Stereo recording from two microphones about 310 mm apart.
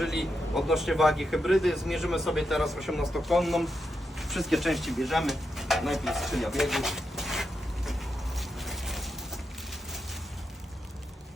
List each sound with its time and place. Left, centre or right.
0.0 s speech: centre
8.4 s mechanisms: centre